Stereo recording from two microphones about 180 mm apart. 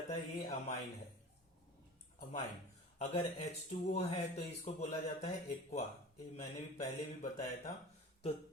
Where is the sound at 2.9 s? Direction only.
35° left (ahead or behind).